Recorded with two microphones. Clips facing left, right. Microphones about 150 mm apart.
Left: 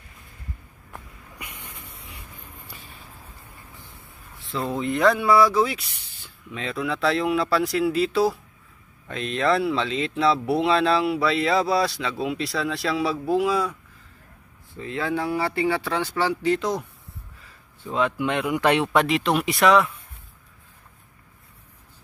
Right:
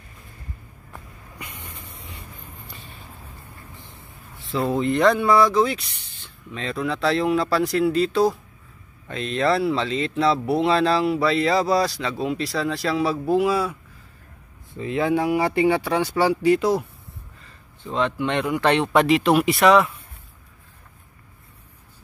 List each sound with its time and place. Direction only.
4.4 s speech: centre (ahead or behind)
6.7 s speech: 40° right (ahead or behind)
7.0 s speech: centre (ahead or behind)
14.7 s speech: 20° right (ahead or behind)
17.8 s speech: 5° left (ahead or behind)
18.9 s speech: centre (ahead or behind)